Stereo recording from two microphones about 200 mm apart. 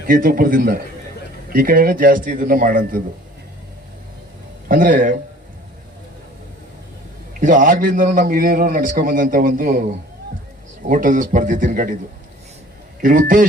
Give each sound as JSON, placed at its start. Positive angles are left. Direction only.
{"t": 0.1, "sound": "a man's voice", "side_deg": -45}
{"t": 4.7, "sound": "speech", "side_deg": -40}
{"t": 7.3, "sound": "a man's voice", "side_deg": -40}
{"t": 10.8, "sound": "speech", "side_deg": -40}
{"t": 13.0, "sound": "speech", "side_deg": -40}